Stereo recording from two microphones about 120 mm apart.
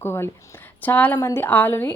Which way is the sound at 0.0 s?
20° left (ahead or behind).